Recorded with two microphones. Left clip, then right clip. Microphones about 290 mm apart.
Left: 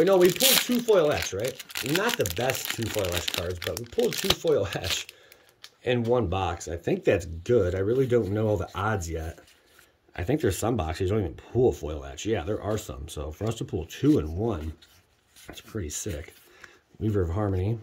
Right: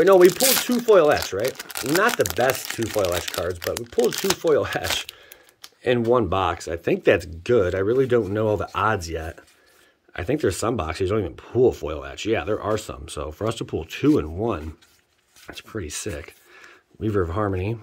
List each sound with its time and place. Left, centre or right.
0.0 s speech: centre
3.9 s speech: centre
5.6 s a sound: centre
6.1 s speech: centre